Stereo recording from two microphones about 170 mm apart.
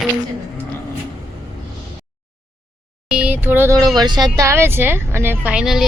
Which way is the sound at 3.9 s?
25° right (ahead or behind).